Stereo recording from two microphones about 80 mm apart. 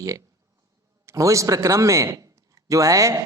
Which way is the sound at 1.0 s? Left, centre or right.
Right.